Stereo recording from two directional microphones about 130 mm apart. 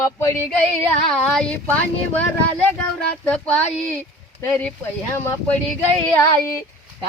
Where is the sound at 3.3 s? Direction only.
10° left (ahead or behind).